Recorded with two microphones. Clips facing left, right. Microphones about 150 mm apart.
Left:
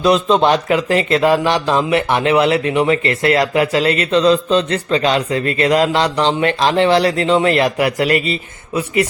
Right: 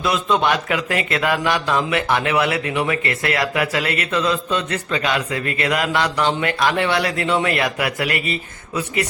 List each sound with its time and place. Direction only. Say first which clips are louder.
0.0 s speech: left 6 dB; 30° left (ahead or behind)